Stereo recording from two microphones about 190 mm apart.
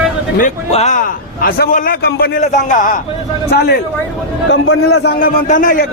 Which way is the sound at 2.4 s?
40° left (ahead or behind).